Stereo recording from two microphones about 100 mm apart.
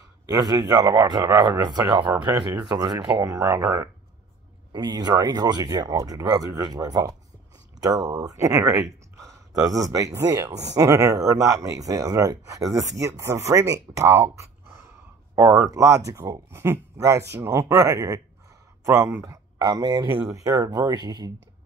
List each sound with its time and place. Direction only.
0.3 s a man's voice: 40° right (ahead or behind)
2.0 s speech: 20° right (ahead or behind)
2.7 s a man's voice: 45° right (ahead or behind)
3.3 s speech: 30° right (ahead or behind)
4.7 s speech: 45° right (ahead or behind); by 14.5 s 25° right (ahead or behind)
15.5 s speech: 30° right (ahead or behind)